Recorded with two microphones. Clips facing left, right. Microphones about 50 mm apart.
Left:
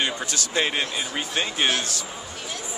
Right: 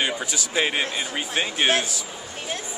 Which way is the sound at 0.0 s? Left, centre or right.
Centre.